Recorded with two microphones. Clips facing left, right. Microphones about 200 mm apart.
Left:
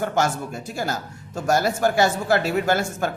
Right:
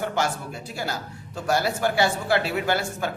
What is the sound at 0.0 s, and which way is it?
A man's voice, 45° left (ahead or behind).